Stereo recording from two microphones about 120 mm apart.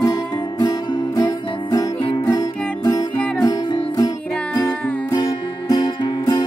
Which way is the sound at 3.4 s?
30° left (ahead or behind).